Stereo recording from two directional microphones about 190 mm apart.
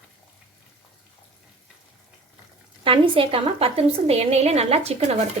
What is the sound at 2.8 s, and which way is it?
A woman's voice, 30° right (ahead or behind).